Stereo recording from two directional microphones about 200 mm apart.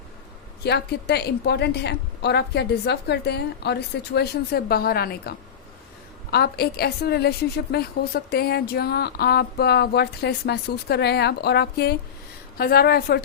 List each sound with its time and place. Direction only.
0.6 s a woman's voice: 55° left (ahead or behind)